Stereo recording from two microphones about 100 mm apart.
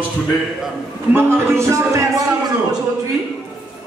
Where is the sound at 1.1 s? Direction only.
25° right (ahead or behind).